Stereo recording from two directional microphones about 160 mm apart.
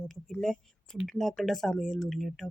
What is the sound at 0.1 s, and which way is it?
Speech, 5° left (ahead or behind).